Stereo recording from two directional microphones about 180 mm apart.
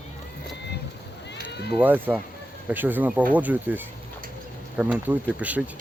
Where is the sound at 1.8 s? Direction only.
10° right (ahead or behind).